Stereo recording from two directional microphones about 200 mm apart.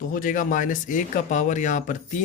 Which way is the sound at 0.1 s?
40° left (ahead or behind).